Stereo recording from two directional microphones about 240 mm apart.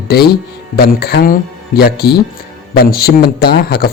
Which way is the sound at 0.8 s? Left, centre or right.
Left.